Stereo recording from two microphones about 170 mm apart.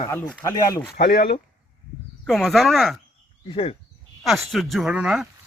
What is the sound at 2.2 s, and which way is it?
Speech, 5° left (ahead or behind).